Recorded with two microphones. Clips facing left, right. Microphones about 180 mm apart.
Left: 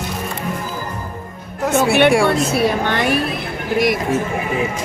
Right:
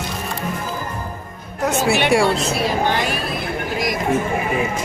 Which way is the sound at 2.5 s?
60° left (ahead or behind).